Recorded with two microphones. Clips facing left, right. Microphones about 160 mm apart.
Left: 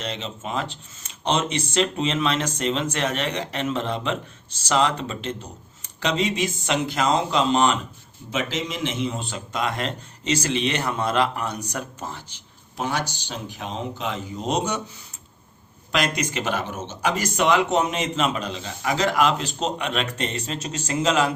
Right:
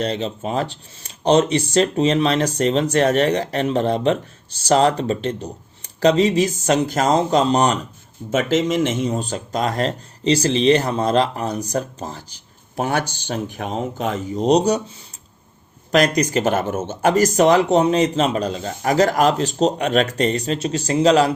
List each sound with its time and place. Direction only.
0.0 s speech: 40° right (ahead or behind)
15.9 s speech: 40° right (ahead or behind)